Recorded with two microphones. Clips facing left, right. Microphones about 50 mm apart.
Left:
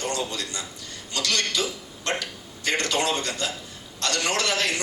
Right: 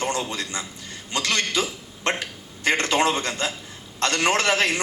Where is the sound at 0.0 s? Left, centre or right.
Right.